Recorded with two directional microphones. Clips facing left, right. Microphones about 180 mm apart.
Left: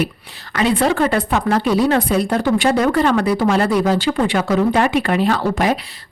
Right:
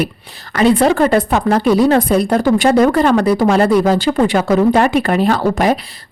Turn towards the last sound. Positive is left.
turn(degrees=-40)  # may be behind; listen again after turning